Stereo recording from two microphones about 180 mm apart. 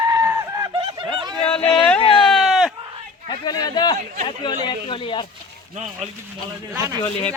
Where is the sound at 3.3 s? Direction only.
20° left (ahead or behind).